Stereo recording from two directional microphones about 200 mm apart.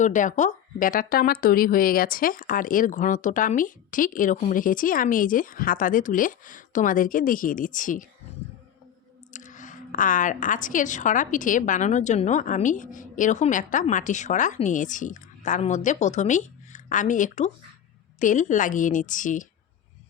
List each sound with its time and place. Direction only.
0.0 s a woman's voice: 40° left (ahead or behind)
9.3 s a woman's voice: 40° left (ahead or behind)